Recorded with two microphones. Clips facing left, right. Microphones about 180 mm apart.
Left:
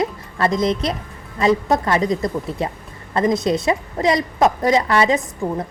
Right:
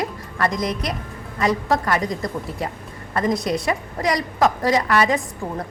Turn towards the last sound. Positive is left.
turn(degrees=20)  # may be behind; listen again after turning